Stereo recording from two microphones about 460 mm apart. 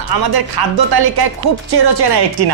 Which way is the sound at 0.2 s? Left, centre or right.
Right.